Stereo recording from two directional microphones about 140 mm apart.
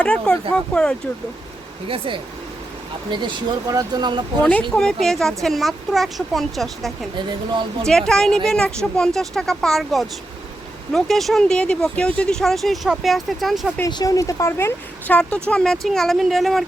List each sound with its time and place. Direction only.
0.0 s speech: 10° left (ahead or behind)
1.9 s speech: 40° right (ahead or behind)
4.7 s speech: 5° left (ahead or behind)
13.8 s speech: 25° left (ahead or behind); by 16.6 s centre (ahead or behind)